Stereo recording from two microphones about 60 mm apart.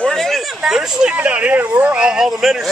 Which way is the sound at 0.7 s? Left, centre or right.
Centre.